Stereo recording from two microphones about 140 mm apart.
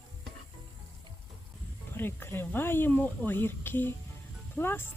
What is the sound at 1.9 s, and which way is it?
Speech, 15° left (ahead or behind).